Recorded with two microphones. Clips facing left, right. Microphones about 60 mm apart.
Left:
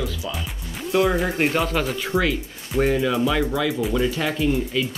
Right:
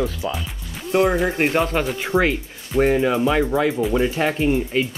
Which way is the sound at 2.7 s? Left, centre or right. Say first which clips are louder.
Right 3 dB; right.